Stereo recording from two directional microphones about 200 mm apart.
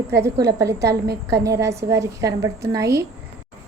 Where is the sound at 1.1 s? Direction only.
55° right (ahead or behind).